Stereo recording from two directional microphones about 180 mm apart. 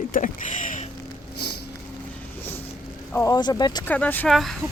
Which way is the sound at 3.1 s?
15° left (ahead or behind).